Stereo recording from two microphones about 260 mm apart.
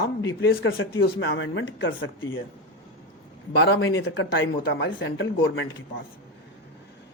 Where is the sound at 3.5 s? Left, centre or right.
Left.